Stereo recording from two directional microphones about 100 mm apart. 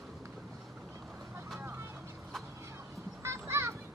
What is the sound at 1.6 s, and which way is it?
Vehicle, 25° right (ahead or behind).